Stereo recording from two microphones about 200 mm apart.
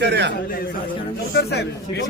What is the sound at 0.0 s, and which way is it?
Speech, 60° right (ahead or behind).